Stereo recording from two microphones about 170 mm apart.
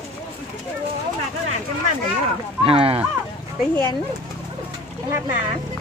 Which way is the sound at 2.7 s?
35° right (ahead or behind).